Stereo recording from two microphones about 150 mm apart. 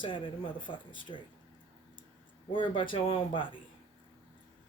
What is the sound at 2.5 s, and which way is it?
Speech, 35° left (ahead or behind).